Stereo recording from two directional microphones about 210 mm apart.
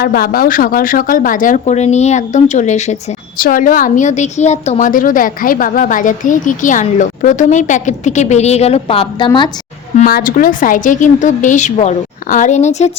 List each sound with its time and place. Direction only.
0.0 s speech: 45° left (ahead or behind); by 9.5 s 20° left (ahead or behind)
10.0 s speech: 45° left (ahead or behind)